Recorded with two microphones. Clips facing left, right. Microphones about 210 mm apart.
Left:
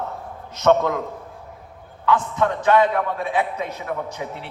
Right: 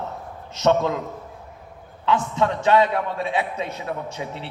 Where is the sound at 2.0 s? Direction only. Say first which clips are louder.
Left 1 dB; 25° right (ahead or behind).